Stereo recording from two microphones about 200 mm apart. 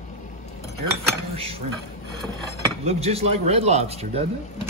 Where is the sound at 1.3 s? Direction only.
30° right (ahead or behind).